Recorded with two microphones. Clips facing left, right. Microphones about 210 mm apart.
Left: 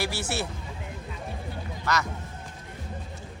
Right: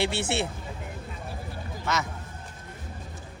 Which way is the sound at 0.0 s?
25° right (ahead or behind).